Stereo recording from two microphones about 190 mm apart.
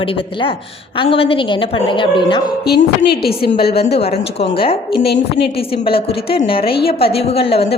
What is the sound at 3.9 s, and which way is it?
A woman's voice, 30° left (ahead or behind).